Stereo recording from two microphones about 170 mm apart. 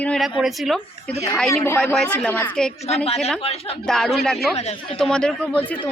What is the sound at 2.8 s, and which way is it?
Speech, 40° left (ahead or behind).